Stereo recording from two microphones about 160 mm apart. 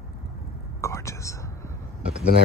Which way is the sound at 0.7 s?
20° left (ahead or behind).